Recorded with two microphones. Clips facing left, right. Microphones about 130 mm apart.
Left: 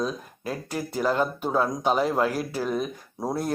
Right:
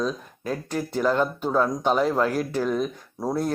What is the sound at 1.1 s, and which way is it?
Speech, 10° left (ahead or behind).